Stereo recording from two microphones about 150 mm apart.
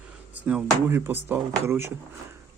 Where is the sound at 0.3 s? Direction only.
10° right (ahead or behind).